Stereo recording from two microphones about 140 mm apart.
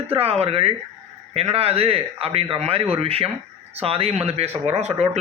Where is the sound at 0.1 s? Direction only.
45° right (ahead or behind).